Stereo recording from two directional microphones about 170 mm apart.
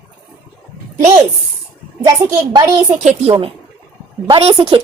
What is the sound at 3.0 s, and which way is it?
A woman's voice, 40° right (ahead or behind).